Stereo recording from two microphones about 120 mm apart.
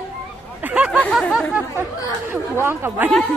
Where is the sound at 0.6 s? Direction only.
10° right (ahead or behind).